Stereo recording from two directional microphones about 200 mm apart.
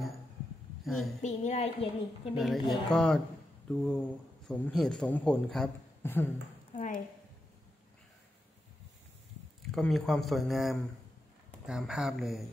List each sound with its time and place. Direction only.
0.8 s a woman's voice: centre (ahead or behind)
1.2 s a woman's voice: 35° left (ahead or behind)
2.3 s a man's voice: centre (ahead or behind)
6.7 s a sound: 40° left (ahead or behind)
9.6 s a man's voice: centre (ahead or behind)